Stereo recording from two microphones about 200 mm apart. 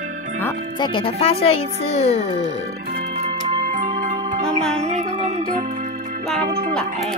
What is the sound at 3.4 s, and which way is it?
Music, 40° right (ahead or behind).